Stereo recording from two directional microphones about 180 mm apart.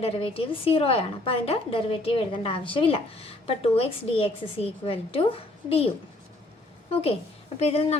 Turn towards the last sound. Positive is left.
turn(degrees=35)  # may be behind; listen again after turning